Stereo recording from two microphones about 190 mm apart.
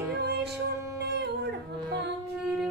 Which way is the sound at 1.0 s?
60° right (ahead or behind).